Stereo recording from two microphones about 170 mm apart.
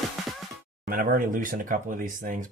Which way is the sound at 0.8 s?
55° right (ahead or behind).